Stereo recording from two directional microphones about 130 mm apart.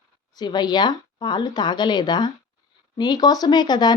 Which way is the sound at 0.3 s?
35° left (ahead or behind).